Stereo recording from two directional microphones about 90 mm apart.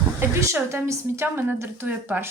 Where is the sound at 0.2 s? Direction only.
30° right (ahead or behind).